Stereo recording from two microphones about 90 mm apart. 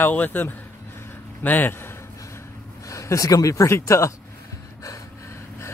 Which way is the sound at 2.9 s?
40° left (ahead or behind).